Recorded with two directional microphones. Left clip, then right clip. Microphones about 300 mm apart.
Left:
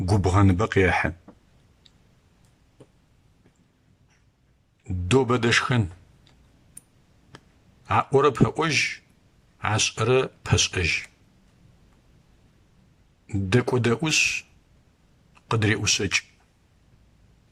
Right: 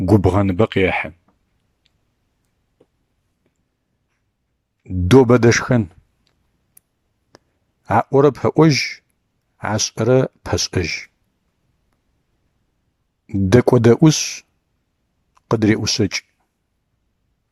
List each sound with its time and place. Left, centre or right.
0.0 s a man's voice: centre
5.0 s speech: centre
7.3 s a sound: centre
7.9 s a man's voice: centre
13.2 s speech: centre